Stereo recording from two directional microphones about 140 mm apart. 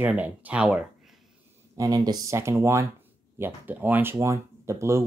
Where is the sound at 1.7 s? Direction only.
25° right (ahead or behind).